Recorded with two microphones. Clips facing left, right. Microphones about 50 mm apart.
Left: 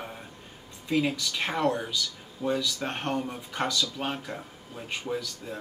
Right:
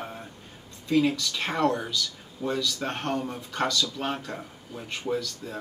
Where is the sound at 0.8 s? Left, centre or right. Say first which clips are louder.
Right 3 dB; centre.